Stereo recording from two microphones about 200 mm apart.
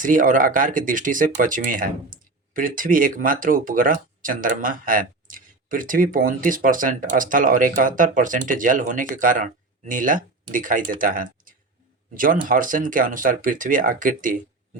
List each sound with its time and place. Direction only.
0.0 s speech: 40° right (ahead or behind)